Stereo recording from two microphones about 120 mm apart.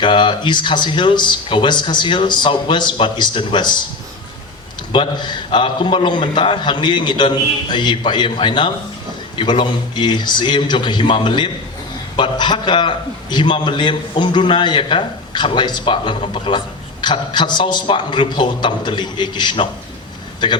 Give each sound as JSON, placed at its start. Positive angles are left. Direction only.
{"t": 0.0, "sound": "a man's voice", "side_deg": 40}
{"t": 4.9, "sound": "a man's voice", "side_deg": 40}